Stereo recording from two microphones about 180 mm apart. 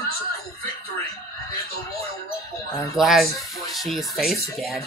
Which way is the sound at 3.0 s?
Centre (ahead or behind).